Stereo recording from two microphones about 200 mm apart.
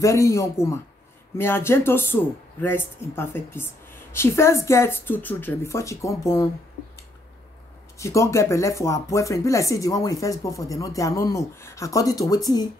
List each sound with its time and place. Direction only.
0.0 s speech: 15° left (ahead or behind)
8.0 s speech: 15° left (ahead or behind)